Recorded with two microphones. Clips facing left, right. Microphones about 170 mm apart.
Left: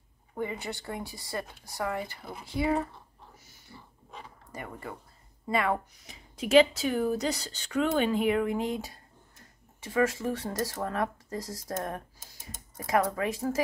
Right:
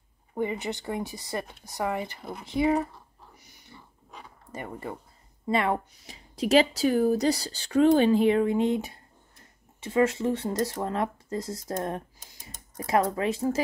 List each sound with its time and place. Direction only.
0.3 s speech: 20° right (ahead or behind)
4.5 s a woman's voice: 25° right (ahead or behind)